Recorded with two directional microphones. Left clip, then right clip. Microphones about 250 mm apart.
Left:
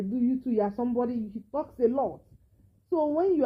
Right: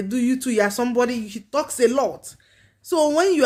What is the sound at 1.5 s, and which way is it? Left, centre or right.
Speech, right.